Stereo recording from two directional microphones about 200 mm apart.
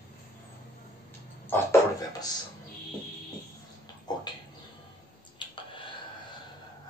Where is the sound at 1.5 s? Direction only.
15° left (ahead or behind).